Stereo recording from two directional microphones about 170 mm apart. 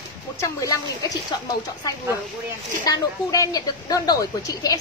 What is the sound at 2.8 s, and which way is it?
A woman's voice, 20° left (ahead or behind).